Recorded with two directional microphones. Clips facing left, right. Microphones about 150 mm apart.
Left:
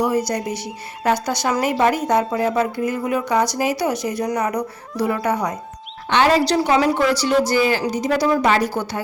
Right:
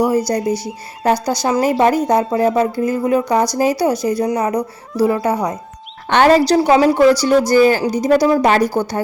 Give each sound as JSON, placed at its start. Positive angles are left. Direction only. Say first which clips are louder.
{"t": 0.3, "sound": "speech", "louder": "right 6 dB", "side_deg": -35}
{"t": 6.1, "sound": "speech", "louder": "right 5 dB", "side_deg": -50}
{"t": 6.5, "sound": "speech", "louder": "right 5 dB", "side_deg": -30}